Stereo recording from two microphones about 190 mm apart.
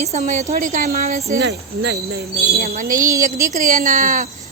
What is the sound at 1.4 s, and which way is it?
Speech, 65° right (ahead or behind).